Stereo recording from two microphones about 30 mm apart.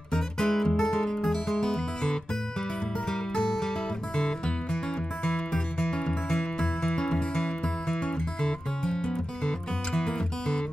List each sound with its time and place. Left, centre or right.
0.1 s music: centre
5.2 s music: left